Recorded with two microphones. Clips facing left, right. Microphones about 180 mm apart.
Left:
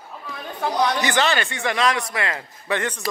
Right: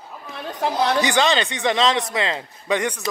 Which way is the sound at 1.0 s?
15° right (ahead or behind).